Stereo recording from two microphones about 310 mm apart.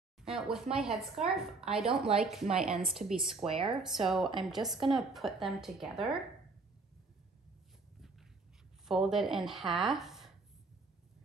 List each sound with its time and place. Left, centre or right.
0.2 s a sound: centre
0.7 s a woman's voice: centre
3.4 s speech: centre
3.7 s a woman's voice: centre
8.8 s a woman's voice: centre